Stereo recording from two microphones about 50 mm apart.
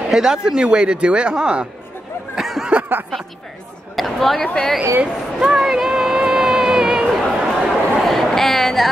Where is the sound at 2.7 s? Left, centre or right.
Right.